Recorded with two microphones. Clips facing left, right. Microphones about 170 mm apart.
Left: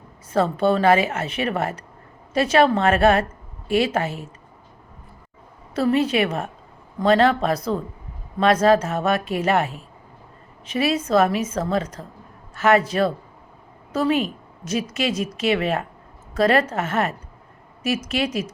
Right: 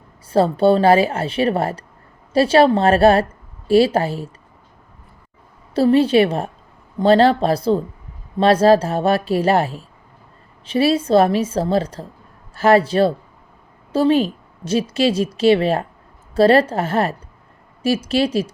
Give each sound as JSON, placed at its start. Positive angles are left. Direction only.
{"t": 0.3, "sound": "a woman's voice", "side_deg": -30}
{"t": 5.7, "sound": "a woman's voice", "side_deg": -30}